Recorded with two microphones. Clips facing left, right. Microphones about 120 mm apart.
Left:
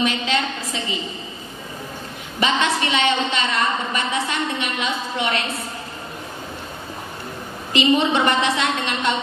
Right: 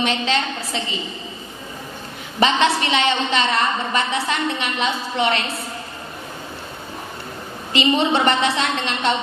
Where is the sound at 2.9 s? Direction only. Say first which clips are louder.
Right 1 dB; 30° right (ahead or behind).